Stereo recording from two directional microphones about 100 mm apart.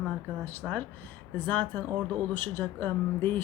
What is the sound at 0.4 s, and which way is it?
Speech, 15° left (ahead or behind).